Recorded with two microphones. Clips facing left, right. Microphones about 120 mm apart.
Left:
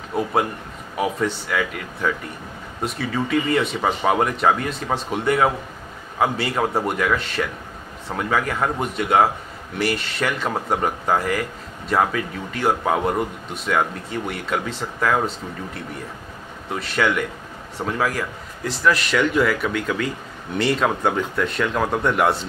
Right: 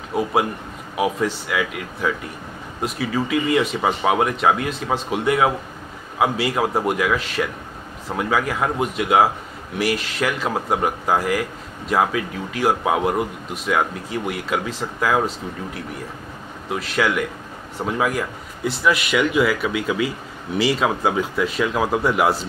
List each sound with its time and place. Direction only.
0.1 s a man's voice: 5° right (ahead or behind)